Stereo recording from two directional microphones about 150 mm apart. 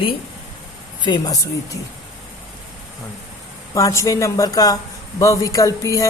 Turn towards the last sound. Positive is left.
turn(degrees=20)  # may be behind; listen again after turning